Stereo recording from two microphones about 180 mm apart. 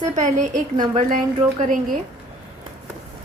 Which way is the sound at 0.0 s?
40° right (ahead or behind).